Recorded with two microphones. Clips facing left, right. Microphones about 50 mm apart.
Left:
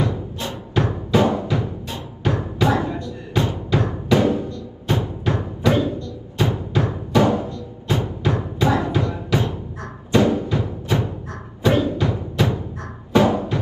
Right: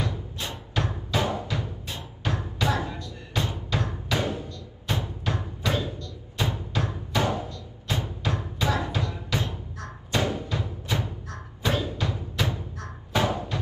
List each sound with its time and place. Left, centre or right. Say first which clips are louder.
0.0 s music: left 8 dB; left